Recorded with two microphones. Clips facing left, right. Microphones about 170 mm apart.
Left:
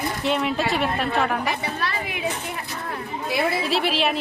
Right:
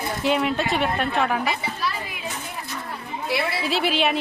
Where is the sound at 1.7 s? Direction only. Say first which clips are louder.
Left 1 dB; 60° left (ahead or behind).